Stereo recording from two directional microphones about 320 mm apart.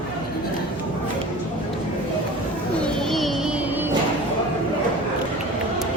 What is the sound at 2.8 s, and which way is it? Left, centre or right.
Music, centre.